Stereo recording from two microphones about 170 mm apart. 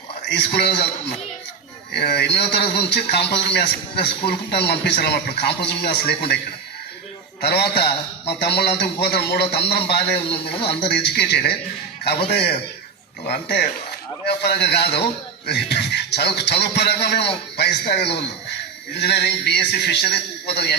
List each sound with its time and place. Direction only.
0.3 s speech: 85° left
1.9 s a man's voice: 75° left (ahead or behind)
7.4 s a man's voice: 75° left (ahead or behind)
10.2 s a man's voice: 35° left (ahead or behind)
10.8 s a man's voice: 80° left
13.2 s a man's voice: 70° left (ahead or behind)